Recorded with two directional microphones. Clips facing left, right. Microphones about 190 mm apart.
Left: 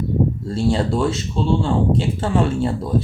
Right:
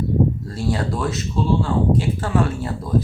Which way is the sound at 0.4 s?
25° left (ahead or behind).